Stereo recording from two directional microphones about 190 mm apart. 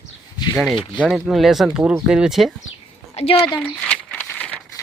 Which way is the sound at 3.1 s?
30° left (ahead or behind).